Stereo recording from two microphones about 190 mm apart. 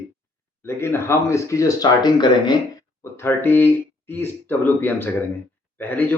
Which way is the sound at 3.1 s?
10° left (ahead or behind).